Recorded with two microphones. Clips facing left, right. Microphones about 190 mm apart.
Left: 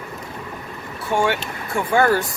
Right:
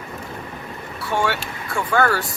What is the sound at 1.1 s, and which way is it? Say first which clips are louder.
Speech: left 2 dB; 15° left (ahead or behind).